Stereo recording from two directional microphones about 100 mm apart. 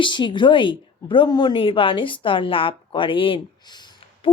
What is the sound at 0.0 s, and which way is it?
A woman's voice, 55° left (ahead or behind).